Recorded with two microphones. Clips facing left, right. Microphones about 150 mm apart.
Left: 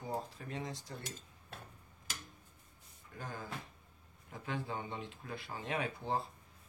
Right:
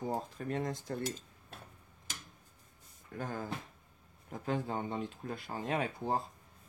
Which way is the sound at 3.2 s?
50° right (ahead or behind).